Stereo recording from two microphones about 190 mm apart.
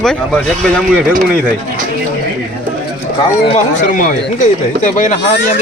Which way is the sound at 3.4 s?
40° left (ahead or behind).